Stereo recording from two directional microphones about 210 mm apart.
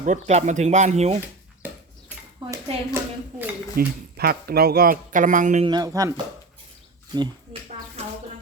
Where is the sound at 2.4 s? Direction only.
25° right (ahead or behind).